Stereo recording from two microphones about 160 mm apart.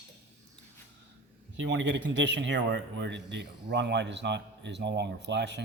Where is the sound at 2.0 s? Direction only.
90° right.